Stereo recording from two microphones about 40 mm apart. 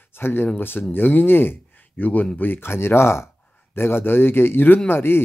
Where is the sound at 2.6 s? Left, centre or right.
Left.